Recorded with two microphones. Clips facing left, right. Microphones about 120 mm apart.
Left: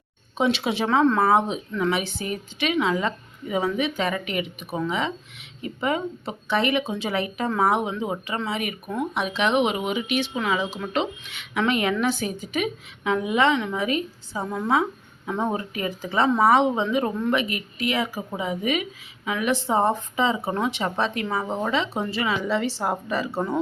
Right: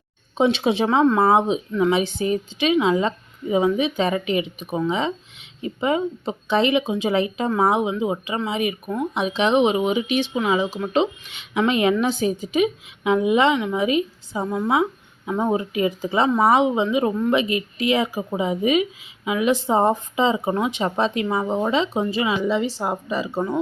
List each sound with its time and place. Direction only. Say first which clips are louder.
0.3 s speech: right 4 dB; 25° right (ahead or behind)
17.3 s speech: right 5 dB; 20° right (ahead or behind)